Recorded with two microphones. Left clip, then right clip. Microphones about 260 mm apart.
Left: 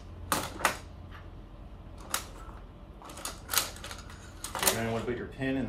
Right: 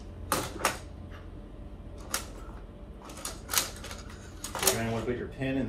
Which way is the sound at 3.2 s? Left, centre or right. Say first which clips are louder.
Even; centre.